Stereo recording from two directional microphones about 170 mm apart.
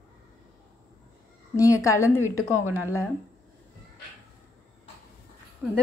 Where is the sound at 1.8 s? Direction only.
15° left (ahead or behind).